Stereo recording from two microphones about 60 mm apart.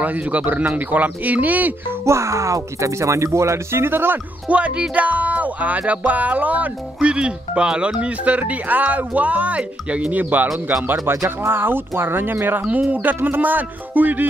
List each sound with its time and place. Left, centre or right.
0.0 s speech: right
2.0 s speech: right
4.5 s speech: right